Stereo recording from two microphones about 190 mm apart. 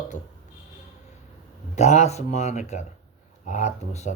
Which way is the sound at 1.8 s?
35° left (ahead or behind).